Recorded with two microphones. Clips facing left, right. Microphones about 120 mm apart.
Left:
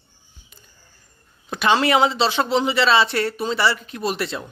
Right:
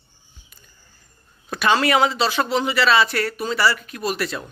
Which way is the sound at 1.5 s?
20° left (ahead or behind).